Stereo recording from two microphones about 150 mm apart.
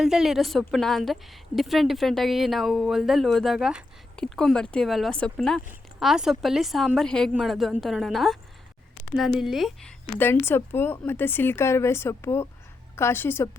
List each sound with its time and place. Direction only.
0.0 s a woman's voice: 5° right (ahead or behind)
4.2 s a woman's voice: 5° left (ahead or behind)
10.2 s speech: 15° left (ahead or behind)